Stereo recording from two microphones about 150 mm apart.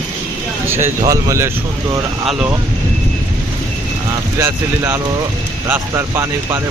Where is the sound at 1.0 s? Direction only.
20° right (ahead or behind).